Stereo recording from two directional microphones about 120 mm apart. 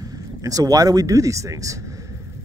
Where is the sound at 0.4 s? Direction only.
30° right (ahead or behind).